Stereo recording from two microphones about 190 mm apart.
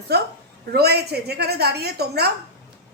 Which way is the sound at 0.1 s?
60° right (ahead or behind).